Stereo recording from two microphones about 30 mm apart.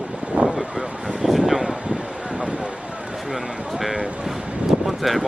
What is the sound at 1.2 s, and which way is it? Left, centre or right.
Speech, centre.